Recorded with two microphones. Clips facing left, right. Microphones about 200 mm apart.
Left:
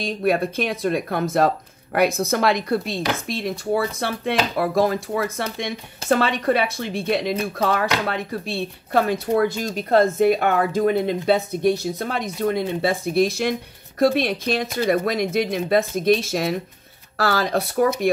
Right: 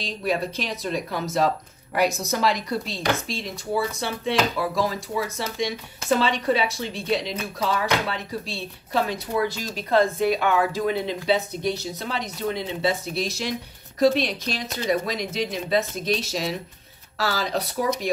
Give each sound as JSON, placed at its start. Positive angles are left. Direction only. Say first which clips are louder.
{"t": 0.0, "sound": "speech", "louder": "left 5 dB", "side_deg": 55}